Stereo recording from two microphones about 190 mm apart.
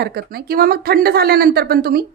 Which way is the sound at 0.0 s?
55° right (ahead or behind).